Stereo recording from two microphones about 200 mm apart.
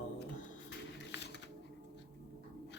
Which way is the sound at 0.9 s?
60° left (ahead or behind).